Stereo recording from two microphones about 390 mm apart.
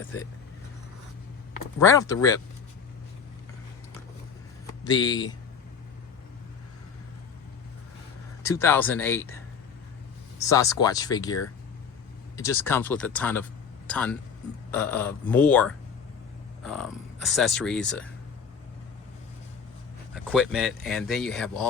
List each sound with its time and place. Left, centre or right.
1.8 s speech: centre
4.8 s speech: centre
8.4 s speech: centre
20.1 s speech: centre